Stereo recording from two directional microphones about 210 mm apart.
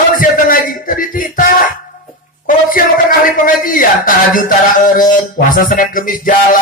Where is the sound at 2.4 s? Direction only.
40° left (ahead or behind).